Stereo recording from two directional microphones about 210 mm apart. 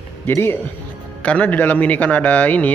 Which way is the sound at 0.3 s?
10° left (ahead or behind).